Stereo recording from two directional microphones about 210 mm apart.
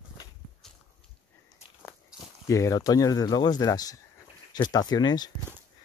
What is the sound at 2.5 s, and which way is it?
Speech, 15° left (ahead or behind).